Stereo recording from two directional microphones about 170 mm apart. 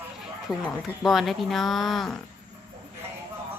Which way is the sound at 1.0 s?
Centre (ahead or behind).